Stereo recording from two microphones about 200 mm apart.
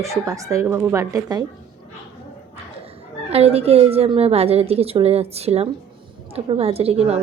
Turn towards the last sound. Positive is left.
turn(degrees=-30)  # may be behind; listen again after turning